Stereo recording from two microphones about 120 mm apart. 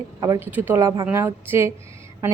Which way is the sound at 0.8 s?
30° right (ahead or behind).